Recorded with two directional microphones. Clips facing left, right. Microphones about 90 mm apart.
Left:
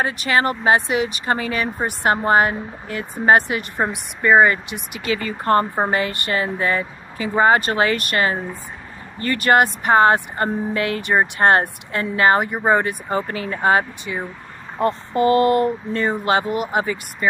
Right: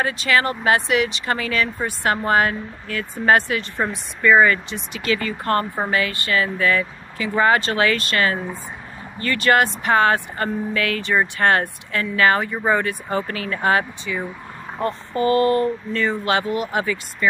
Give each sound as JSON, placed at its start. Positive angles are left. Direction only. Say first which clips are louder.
{"t": 0.0, "sound": "speech", "louder": "left 1 dB", "side_deg": 25}
{"t": 4.6, "sound": "speech", "louder": "right 1 dB", "side_deg": 15}
{"t": 14.8, "sound": "speech", "louder": "left 4 dB", "side_deg": 30}
{"t": 15.6, "sound": "speech", "louder": "left 1 dB", "side_deg": 20}